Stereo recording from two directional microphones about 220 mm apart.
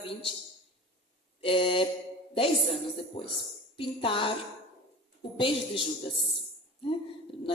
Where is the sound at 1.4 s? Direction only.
25° left (ahead or behind).